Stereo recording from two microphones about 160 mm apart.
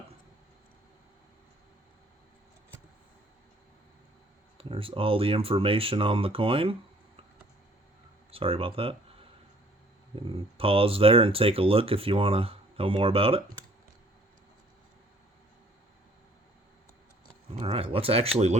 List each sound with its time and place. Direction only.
4.5 s speech: 35° right (ahead or behind)
8.3 s speech: 35° right (ahead or behind)
10.2 s speech: 35° right (ahead or behind)
17.6 s speech: 35° right (ahead or behind)